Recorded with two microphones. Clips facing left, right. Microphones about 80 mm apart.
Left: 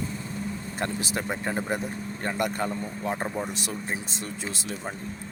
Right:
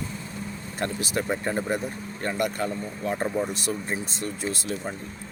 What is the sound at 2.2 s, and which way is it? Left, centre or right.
Speech, left.